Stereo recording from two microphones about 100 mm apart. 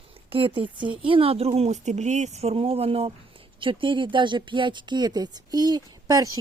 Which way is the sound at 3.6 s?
55° right (ahead or behind).